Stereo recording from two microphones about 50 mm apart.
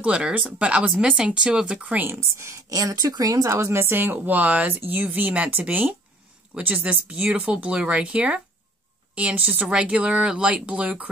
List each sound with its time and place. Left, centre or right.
0.0 s speech: right
1.8 s speech: right
2.1 s a woman's voice: right
5.0 s speech: right